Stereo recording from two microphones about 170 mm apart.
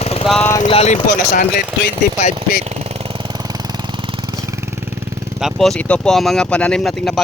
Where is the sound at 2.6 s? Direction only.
35° right (ahead or behind).